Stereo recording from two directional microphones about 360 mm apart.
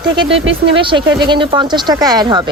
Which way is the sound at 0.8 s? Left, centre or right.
Centre.